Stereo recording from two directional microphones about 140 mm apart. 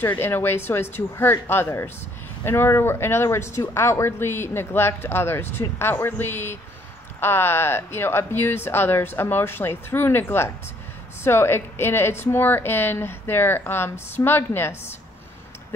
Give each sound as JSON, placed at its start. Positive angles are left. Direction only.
{"t": 0.0, "sound": "speech", "side_deg": 15}